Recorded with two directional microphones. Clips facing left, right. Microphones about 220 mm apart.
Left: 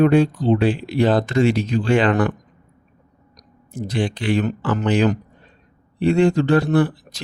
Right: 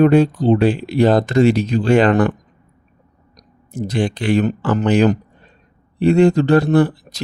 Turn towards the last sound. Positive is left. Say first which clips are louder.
# right 3 dB
turn(degrees=-40)  # may be behind; listen again after turning